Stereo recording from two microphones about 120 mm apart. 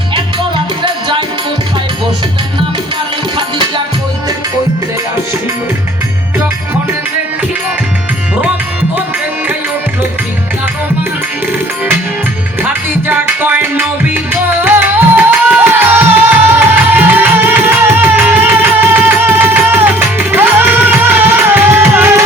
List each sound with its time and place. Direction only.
0.8 s music: 40° right (ahead or behind)
12.6 s music: 15° right (ahead or behind)